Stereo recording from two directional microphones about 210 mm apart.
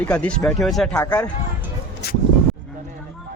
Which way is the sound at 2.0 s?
50° left (ahead or behind).